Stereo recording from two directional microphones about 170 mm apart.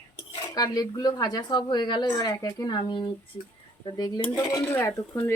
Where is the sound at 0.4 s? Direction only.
20° left (ahead or behind).